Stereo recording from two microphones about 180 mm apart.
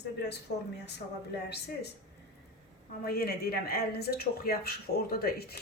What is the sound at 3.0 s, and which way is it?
Speech, 60° left (ahead or behind).